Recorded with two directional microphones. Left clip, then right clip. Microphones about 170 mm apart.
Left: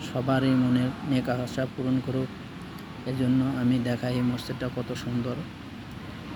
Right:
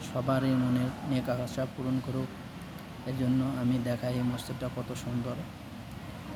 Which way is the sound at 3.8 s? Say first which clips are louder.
Left 3 dB; 10° right (ahead or behind).